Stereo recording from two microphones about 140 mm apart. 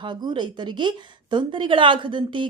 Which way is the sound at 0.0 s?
30° right (ahead or behind).